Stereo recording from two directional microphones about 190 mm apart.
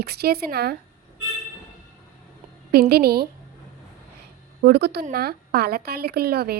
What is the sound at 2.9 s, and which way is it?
Speech, 55° right (ahead or behind).